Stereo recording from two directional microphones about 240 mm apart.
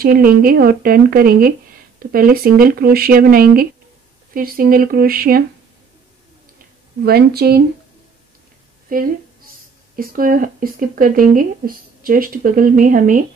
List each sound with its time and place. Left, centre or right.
0.0 s speech: right
7.1 s speech: right
8.8 s a woman's voice: right